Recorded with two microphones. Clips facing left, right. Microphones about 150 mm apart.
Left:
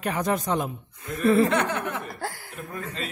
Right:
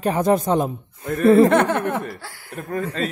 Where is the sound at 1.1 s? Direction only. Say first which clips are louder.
Right 7 dB; 45° right (ahead or behind).